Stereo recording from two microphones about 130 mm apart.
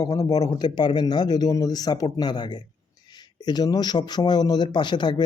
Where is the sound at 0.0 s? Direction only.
25° left (ahead or behind).